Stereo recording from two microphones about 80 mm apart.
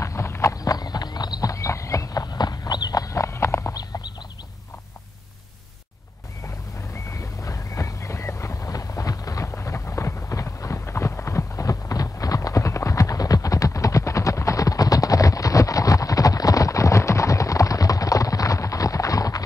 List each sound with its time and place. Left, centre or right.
0.0 s horse: left
0.7 s clip-clop: left
3.7 s a sound: left
7.1 s horse: left